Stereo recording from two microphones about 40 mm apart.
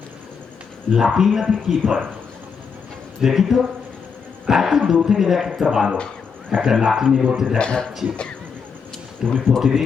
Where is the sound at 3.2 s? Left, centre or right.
Centre.